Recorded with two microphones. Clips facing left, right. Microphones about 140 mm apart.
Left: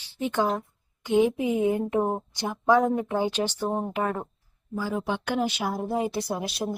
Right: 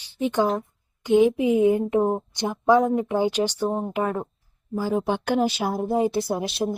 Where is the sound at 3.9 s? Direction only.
15° right (ahead or behind).